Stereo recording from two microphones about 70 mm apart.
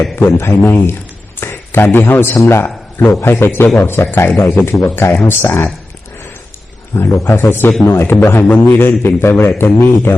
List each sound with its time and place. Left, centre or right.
0.2 s a man's voice: left
6.9 s a man's voice: left